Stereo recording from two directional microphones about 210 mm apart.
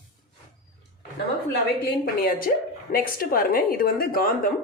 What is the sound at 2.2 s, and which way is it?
A woman's voice, 45° left (ahead or behind).